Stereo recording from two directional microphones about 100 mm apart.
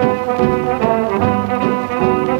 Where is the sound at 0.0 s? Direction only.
25° left (ahead or behind).